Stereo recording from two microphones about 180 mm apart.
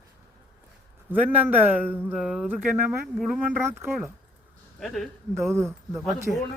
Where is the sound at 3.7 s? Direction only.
15° right (ahead or behind).